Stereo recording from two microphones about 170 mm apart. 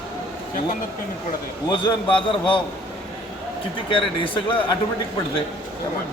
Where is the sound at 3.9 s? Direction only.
30° left (ahead or behind).